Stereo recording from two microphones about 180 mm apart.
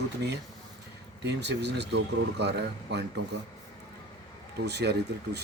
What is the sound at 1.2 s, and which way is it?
Speech, 70° right (ahead or behind).